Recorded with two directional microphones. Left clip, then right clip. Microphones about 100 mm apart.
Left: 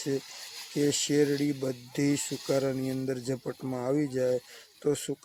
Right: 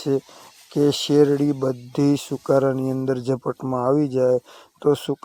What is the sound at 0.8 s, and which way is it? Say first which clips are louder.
Speech: right 9 dB; 20° right (ahead or behind).